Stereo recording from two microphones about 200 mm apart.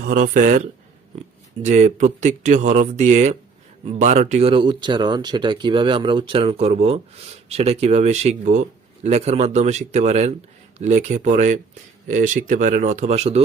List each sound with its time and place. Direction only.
0.0 s speech: 45° right (ahead or behind)